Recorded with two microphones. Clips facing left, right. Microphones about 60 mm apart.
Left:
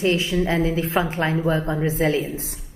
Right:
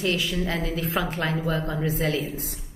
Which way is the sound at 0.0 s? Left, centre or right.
Left.